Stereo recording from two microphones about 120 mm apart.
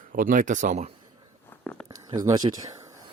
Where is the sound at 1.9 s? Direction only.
30° right (ahead or behind).